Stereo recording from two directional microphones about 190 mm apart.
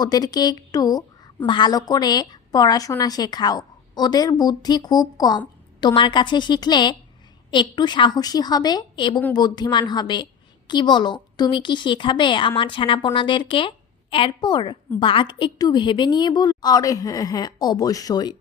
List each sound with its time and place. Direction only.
0.0 s a woman's voice: 20° left (ahead or behind)